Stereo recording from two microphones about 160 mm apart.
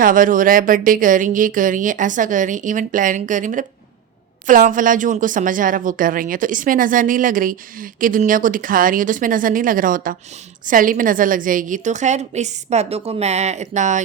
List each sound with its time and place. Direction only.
0.0 s a woman's voice: 60° right (ahead or behind)